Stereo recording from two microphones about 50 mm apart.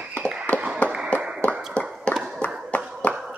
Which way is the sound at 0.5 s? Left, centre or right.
Left.